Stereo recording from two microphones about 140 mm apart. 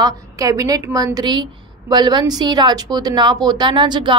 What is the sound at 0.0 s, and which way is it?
A woman's voice, 25° right (ahead or behind).